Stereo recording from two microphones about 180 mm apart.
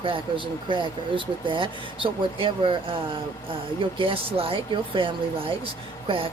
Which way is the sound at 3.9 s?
30° right (ahead or behind).